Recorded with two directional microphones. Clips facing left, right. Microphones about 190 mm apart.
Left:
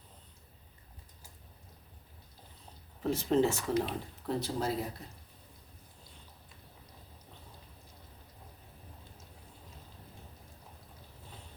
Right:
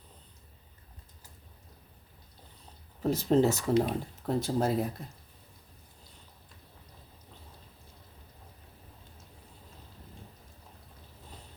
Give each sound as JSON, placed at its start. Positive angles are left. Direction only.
{"t": 3.0, "sound": "speech", "side_deg": -40}
{"t": 4.4, "sound": "speech", "side_deg": -50}